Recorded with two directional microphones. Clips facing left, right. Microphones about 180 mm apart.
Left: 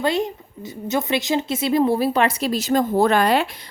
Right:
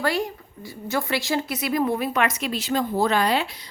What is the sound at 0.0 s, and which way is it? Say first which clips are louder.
A woman's voice: left 3 dB; 20° left (ahead or behind).